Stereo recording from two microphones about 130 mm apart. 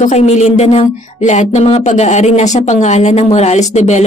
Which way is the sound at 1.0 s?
65° left (ahead or behind).